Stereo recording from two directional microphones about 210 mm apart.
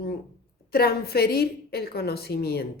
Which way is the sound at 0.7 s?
50° left (ahead or behind).